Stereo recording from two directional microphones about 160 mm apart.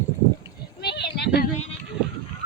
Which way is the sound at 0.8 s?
90° left.